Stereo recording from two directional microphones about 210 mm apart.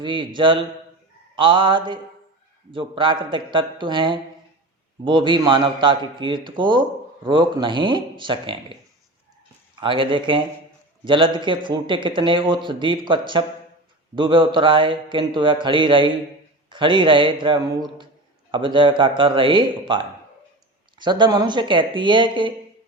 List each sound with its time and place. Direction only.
0.0 s a man's voice: 20° right (ahead or behind)
9.8 s a man's voice: 25° right (ahead or behind)
21.0 s a man's voice: 20° right (ahead or behind)